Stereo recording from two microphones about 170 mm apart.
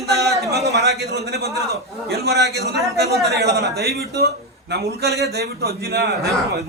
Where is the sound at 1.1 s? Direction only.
70° right (ahead or behind).